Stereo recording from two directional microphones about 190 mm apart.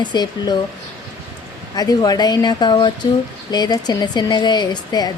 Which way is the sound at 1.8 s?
20° left (ahead or behind).